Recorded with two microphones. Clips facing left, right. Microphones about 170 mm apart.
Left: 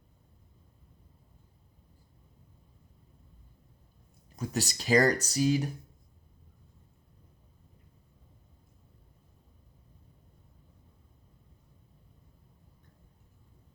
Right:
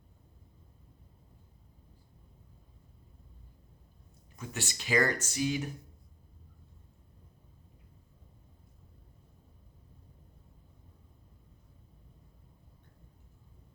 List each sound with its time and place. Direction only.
4.4 s speech: 35° left (ahead or behind)